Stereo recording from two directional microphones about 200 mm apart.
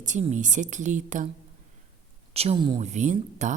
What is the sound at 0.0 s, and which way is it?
Speech, 35° right (ahead or behind).